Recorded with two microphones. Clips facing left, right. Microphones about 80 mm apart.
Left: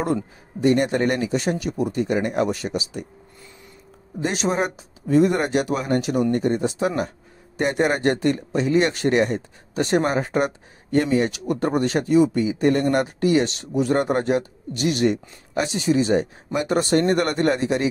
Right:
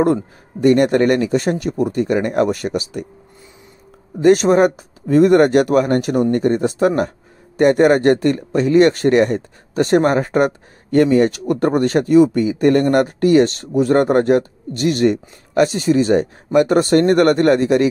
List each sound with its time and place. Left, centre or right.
0.0 s speech: right
4.2 s speech: right